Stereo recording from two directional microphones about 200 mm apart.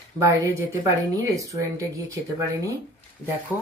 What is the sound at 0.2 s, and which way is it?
Speech, 15° right (ahead or behind).